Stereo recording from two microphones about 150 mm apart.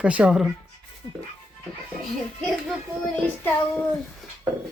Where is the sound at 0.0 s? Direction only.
10° right (ahead or behind).